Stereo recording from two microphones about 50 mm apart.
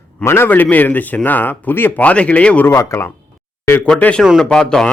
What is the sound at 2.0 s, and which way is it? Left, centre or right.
Speech, left.